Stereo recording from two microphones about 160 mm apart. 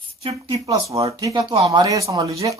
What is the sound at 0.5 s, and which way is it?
Speech, 20° right (ahead or behind).